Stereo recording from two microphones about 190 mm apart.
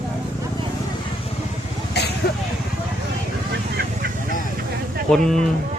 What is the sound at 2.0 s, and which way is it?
Vehicle, 60° left (ahead or behind).